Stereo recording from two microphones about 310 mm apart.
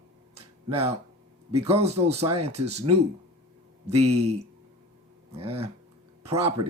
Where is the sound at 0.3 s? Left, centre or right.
Centre.